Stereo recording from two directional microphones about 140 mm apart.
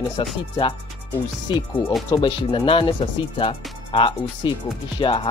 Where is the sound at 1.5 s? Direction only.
35° left (ahead or behind).